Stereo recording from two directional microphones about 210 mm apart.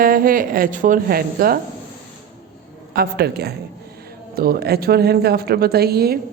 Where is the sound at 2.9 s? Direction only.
50° right (ahead or behind).